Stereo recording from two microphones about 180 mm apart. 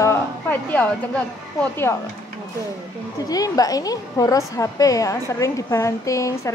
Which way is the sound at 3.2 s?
20° left (ahead or behind).